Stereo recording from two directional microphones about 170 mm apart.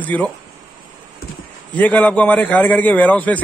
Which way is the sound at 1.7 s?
10° left (ahead or behind).